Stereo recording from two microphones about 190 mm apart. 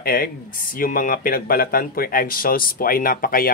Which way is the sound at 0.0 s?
50° left (ahead or behind).